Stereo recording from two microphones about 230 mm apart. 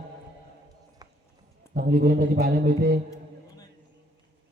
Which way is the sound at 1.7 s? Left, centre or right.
Right.